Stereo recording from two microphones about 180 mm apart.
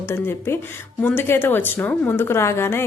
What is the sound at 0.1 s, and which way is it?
A woman's voice, 15° left (ahead or behind).